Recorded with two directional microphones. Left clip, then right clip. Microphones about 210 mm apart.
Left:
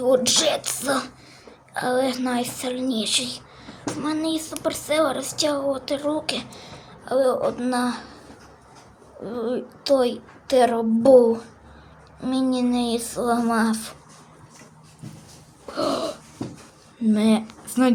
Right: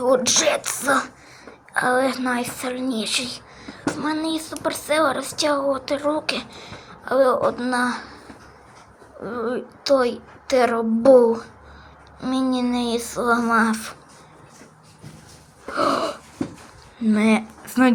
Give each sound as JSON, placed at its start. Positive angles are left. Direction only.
{"t": 0.0, "sound": "a woman's voice", "side_deg": 5}
{"t": 9.2, "sound": "a woman's voice", "side_deg": 5}
{"t": 15.7, "sound": "a sound", "side_deg": 5}
{"t": 17.0, "sound": "speech", "side_deg": 10}